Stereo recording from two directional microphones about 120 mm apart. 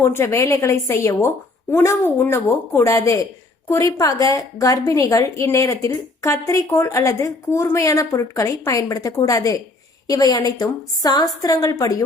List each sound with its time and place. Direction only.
0.0 s a woman's voice: 20° left (ahead or behind)